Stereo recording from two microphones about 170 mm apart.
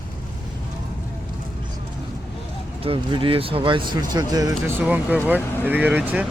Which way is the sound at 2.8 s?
30° right (ahead or behind).